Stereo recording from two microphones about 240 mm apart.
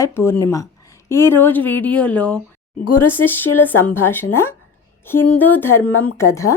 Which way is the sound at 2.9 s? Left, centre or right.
Left.